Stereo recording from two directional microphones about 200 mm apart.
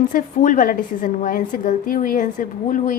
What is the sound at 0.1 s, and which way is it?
A woman's voice, 40° left (ahead or behind).